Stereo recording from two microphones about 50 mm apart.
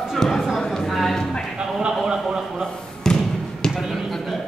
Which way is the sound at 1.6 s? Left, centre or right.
Centre.